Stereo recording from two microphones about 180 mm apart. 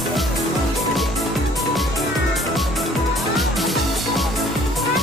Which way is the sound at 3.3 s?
Centre (ahead or behind).